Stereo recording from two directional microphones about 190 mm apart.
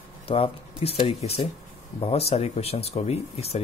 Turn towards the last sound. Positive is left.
turn(degrees=35)  # may be behind; listen again after turning